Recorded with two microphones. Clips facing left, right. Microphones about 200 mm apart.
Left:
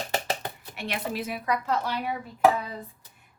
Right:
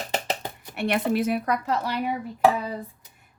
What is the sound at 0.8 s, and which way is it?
Speech, 55° right (ahead or behind).